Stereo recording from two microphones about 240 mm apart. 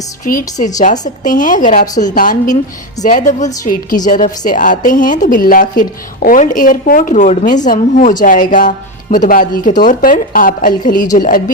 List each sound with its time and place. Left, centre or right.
0.3 s a woman's voice: left